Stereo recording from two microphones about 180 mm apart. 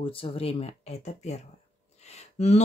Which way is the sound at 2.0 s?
40° left (ahead or behind).